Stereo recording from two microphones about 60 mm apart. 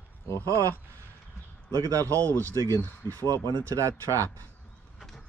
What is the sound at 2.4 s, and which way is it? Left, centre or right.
Speech, right.